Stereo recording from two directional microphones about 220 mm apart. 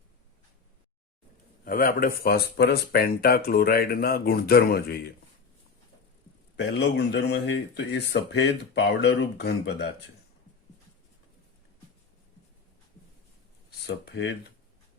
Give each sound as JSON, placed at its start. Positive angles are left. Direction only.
{"t": 1.6, "sound": "speech", "side_deg": 40}
{"t": 6.6, "sound": "speech", "side_deg": 50}
{"t": 13.7, "sound": "speech", "side_deg": 50}